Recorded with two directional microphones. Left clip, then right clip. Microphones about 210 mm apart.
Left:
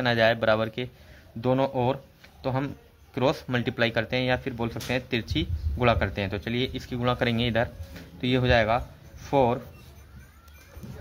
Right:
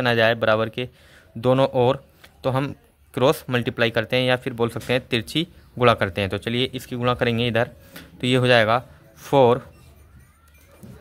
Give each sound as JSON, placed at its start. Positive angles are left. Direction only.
{"t": 0.0, "sound": "speech", "side_deg": -30}